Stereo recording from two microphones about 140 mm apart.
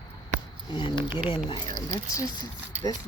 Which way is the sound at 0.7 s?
35° left (ahead or behind).